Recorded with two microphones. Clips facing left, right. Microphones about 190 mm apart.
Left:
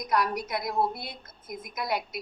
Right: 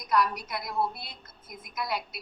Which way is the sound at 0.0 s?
45° left (ahead or behind).